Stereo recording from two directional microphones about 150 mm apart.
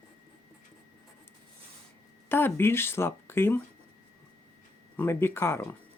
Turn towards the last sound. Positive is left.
turn(degrees=15)  # may be behind; listen again after turning